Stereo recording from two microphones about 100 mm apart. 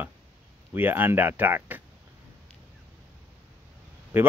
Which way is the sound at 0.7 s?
20° right (ahead or behind).